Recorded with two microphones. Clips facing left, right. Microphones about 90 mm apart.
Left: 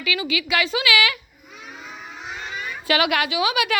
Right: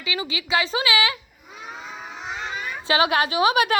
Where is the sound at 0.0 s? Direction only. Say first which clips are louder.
Left 4 dB; 30° right (ahead or behind).